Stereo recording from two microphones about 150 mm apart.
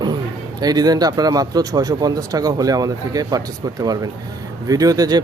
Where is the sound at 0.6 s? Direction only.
25° right (ahead or behind).